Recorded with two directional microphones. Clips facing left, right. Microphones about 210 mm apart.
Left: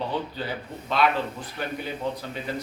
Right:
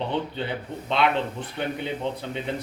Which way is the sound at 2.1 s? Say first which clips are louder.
Left 2 dB; 25° right (ahead or behind).